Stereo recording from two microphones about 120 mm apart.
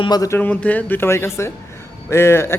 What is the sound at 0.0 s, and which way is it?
Speech, 35° left (ahead or behind).